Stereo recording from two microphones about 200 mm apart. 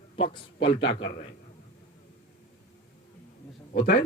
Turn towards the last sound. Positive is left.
turn(degrees=50)  # may be behind; listen again after turning